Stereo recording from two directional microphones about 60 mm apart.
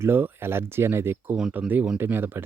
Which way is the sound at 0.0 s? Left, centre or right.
Right.